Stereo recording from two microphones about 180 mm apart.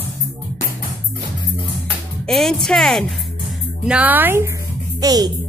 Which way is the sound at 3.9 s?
10° right (ahead or behind).